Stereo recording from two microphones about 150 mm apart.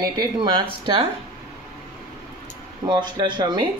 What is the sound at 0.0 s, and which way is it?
Speech, 30° right (ahead or behind).